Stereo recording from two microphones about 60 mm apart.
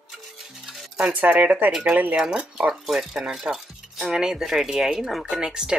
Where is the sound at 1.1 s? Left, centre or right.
Right.